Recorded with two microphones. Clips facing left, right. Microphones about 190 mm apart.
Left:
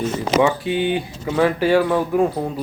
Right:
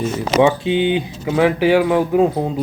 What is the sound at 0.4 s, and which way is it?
Speech, 20° right (ahead or behind).